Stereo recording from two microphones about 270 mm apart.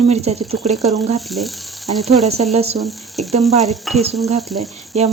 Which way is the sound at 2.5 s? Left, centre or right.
Right.